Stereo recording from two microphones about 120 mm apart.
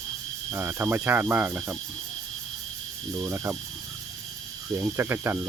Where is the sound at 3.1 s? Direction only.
25° right (ahead or behind).